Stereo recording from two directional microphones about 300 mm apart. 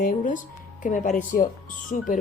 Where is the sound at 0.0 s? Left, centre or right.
Left.